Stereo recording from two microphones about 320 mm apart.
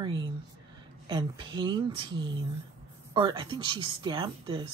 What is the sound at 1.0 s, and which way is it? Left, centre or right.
Speech, centre.